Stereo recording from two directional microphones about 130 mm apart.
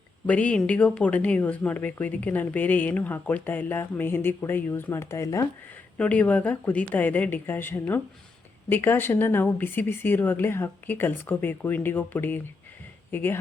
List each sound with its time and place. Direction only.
0.3 s speech: 10° left (ahead or behind)
6.0 s speech: 10° left (ahead or behind)